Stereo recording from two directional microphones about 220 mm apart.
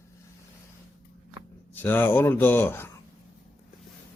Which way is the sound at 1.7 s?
10° left (ahead or behind).